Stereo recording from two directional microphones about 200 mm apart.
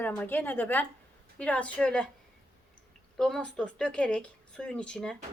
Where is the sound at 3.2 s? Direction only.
5° left (ahead or behind).